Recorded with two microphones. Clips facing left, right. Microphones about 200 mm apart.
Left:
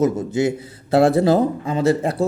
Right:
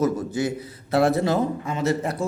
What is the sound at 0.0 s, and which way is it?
A man's voice, 25° left (ahead or behind).